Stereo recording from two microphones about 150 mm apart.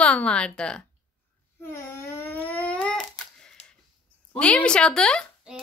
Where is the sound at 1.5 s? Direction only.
15° left (ahead or behind).